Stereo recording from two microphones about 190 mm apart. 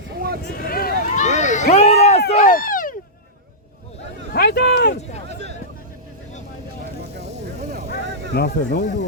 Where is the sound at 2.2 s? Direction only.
50° left (ahead or behind).